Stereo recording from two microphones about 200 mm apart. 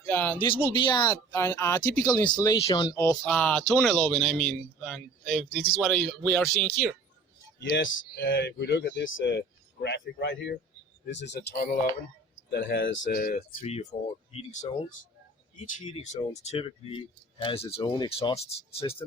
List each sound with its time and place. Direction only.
0.1 s speech: 10° left (ahead or behind)
0.7 s speech: 25° left (ahead or behind); by 6.9 s 5° left (ahead or behind)
7.6 s speech: 60° left (ahead or behind); by 11.9 s 45° left (ahead or behind)
12.5 s speech: 55° left (ahead or behind)
13.9 s speech: 20° left (ahead or behind)
14.3 s speech: 35° left (ahead or behind)
16.3 s speech: 35° left (ahead or behind)